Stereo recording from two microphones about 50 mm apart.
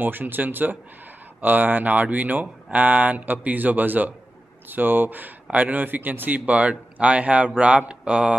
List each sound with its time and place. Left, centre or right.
0.0 s a man's voice: right